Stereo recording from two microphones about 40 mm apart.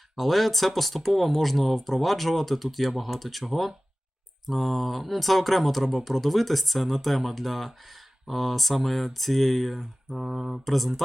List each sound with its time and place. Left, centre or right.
0.2 s speech: centre